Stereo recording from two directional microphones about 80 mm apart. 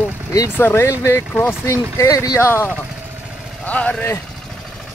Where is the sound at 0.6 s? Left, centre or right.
Left.